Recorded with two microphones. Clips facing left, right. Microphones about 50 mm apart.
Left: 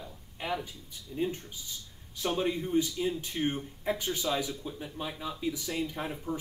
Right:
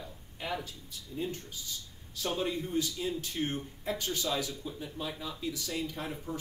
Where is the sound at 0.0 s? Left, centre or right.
Centre.